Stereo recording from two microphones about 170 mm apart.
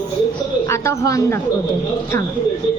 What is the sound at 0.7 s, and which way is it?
Speech, 15° left (ahead or behind).